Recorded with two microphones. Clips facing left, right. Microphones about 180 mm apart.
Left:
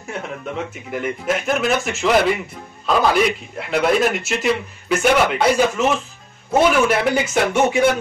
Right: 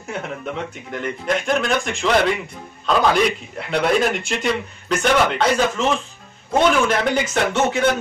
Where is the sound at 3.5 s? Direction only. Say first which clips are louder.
Left 3 dB; centre (ahead or behind).